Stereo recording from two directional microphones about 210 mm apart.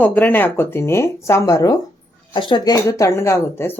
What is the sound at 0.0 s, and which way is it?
Speech, 10° left (ahead or behind).